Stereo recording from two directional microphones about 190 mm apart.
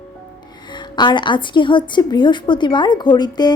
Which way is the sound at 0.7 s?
25° left (ahead or behind).